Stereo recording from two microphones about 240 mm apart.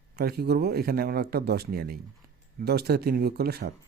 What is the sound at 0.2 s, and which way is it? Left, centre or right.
Speech, right.